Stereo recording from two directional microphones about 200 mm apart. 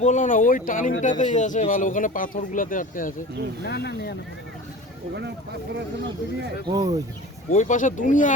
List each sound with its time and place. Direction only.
0.0 s speech: 40° left (ahead or behind)
3.6 s speech: 55° left (ahead or behind)
6.7 s speech: 20° right (ahead or behind)
7.5 s speech: 40° left (ahead or behind)